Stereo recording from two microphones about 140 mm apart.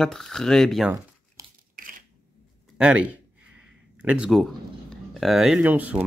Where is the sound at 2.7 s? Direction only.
10° right (ahead or behind).